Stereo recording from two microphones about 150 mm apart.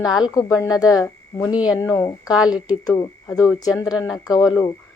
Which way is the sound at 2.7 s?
25° left (ahead or behind).